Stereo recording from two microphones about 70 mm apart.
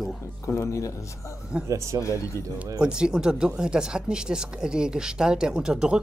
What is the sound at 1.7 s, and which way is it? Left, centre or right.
Speech, right.